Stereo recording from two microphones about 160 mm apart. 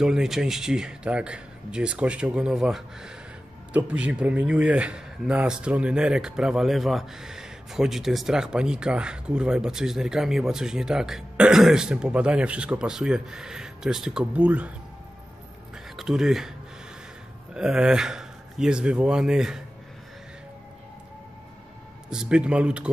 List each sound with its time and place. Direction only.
0.0 s speech: 5° right (ahead or behind)
16.0 s speech: centre (ahead or behind)
17.6 s speech: 5° right (ahead or behind)
22.1 s speech: 5° right (ahead or behind)